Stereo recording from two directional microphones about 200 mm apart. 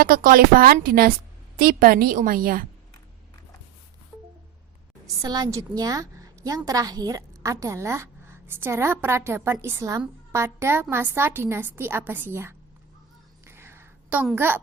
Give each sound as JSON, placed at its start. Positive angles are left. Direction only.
{"t": 0.0, "sound": "speech", "side_deg": -45}
{"t": 5.2, "sound": "a woman's voice", "side_deg": -15}
{"t": 13.4, "sound": "a sound", "side_deg": -10}